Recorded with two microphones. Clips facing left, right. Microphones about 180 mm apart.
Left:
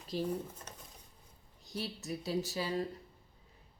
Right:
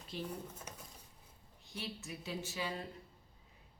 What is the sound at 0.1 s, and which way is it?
Speech, 40° left (ahead or behind).